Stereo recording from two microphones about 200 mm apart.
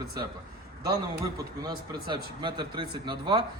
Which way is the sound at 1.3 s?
20° right (ahead or behind).